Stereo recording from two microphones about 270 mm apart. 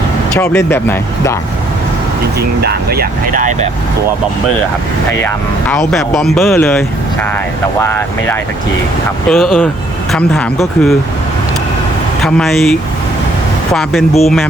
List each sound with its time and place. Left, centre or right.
0.3 s speech: centre
2.6 s speech: right
5.2 s speech: centre
12.2 s speech: centre